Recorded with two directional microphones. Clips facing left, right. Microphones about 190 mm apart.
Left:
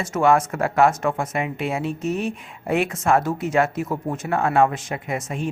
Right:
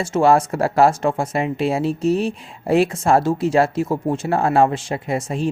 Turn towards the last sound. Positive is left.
turn(degrees=-35)  # may be behind; listen again after turning